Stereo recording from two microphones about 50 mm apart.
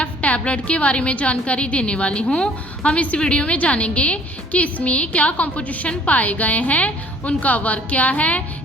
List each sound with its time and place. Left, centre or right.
0.0 s a woman's voice: left